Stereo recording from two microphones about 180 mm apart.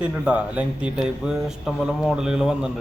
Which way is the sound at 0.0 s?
5° right (ahead or behind).